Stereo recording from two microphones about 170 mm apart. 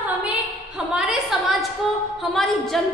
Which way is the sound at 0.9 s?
5° right (ahead or behind).